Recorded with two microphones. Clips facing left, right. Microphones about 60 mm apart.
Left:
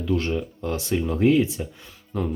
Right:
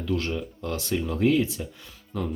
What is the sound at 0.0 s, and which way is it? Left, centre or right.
Speech, left.